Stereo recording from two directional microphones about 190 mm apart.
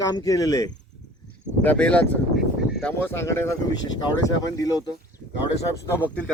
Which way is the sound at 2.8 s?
10° left (ahead or behind).